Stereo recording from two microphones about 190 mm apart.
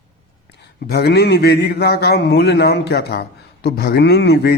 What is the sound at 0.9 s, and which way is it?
A man's voice, 60° left (ahead or behind).